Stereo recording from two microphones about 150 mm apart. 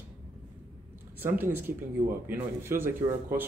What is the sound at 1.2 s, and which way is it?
Speech, 15° right (ahead or behind).